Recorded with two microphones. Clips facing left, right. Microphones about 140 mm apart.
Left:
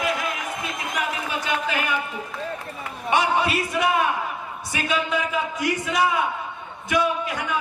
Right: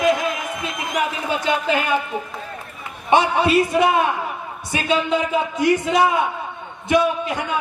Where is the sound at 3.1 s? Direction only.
25° right (ahead or behind).